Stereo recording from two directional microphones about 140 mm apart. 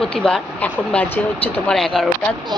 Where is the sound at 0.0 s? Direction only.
5° left (ahead or behind).